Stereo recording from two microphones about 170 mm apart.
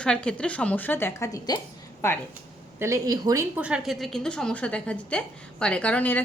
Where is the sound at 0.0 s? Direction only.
5° left (ahead or behind).